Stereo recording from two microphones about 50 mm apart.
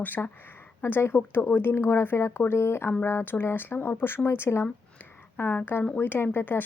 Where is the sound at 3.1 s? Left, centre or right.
Left.